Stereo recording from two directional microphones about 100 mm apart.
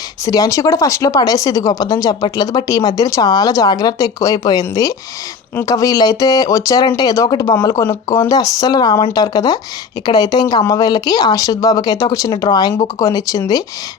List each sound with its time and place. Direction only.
0.3 s speech: 35° left (ahead or behind)